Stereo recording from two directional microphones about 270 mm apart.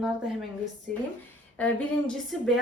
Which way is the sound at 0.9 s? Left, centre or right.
Centre.